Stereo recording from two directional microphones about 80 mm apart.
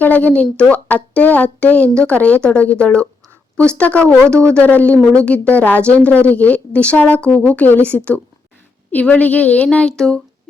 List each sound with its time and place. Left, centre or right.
0.0 s a woman's voice: left